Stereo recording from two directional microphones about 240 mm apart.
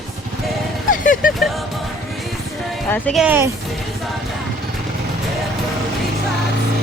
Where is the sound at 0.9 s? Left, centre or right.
Left.